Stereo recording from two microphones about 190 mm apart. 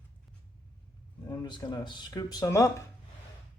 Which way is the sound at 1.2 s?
20° left (ahead or behind).